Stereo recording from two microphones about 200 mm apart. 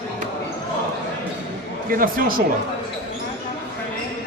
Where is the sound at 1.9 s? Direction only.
45° right (ahead or behind).